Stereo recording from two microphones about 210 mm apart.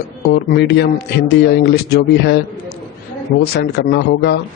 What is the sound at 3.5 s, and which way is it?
Speech, 50° left (ahead or behind).